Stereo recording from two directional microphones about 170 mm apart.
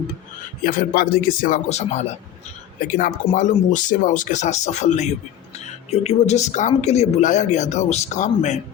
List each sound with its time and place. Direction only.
0.6 s speech: 55° left (ahead or behind)